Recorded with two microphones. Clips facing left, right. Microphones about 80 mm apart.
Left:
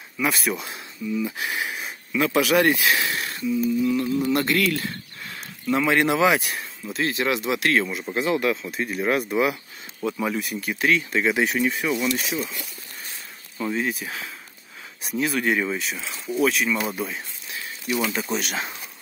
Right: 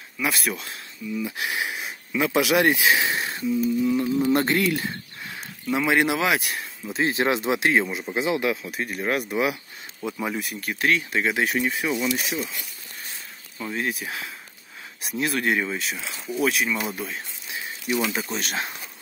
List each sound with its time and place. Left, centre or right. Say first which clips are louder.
0.2 s speech: left 2 dB; centre; by 3.5 s right
3.8 s music: even; centre
4.3 s speech: right 1 dB; right; by 6.6 s centre
6.9 s speech: right 1 dB; right; by 12.5 s centre
13.6 s speech: left 3 dB; centre
18.3 s speech: left 2 dB; centre